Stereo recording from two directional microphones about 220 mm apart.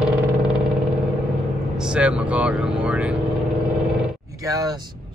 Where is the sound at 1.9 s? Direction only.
5° right (ahead or behind).